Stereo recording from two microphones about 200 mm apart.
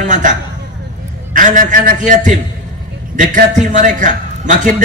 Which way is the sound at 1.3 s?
40° right (ahead or behind).